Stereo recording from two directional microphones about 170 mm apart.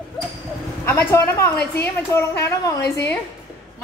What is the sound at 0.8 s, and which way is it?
A woman's voice, 15° left (ahead or behind).